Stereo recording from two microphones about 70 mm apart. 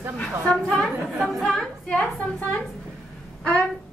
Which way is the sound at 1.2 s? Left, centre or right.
Centre.